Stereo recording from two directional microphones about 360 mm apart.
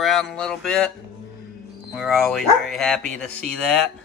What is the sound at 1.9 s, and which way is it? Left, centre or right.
Speech, centre.